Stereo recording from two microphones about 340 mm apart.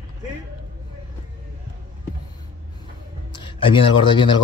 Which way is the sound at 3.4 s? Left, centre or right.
Centre.